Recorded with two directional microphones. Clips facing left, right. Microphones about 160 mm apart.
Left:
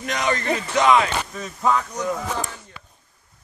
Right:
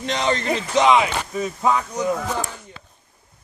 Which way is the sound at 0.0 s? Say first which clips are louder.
Right 2 dB; 25° right (ahead or behind).